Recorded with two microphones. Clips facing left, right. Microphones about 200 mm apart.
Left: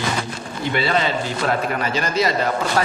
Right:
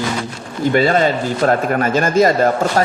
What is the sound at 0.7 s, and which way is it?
A man's voice, 45° right (ahead or behind).